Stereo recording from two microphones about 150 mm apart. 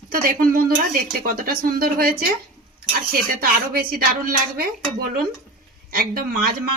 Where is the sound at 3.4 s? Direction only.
75° right (ahead or behind).